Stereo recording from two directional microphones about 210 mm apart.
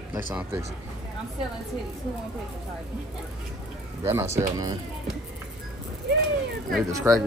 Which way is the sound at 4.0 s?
10° right (ahead or behind).